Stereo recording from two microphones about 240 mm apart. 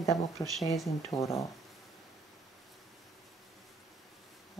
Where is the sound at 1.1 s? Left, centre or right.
Left.